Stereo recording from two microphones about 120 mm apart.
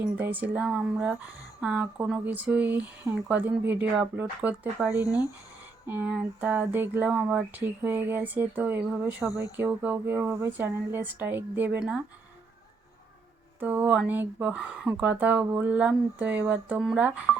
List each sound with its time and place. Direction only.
0.2 s speech: 15° right (ahead or behind)
13.6 s speech: 15° right (ahead or behind)